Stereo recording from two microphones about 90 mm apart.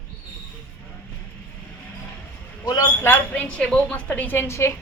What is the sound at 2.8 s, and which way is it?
A woman's voice, 25° left (ahead or behind).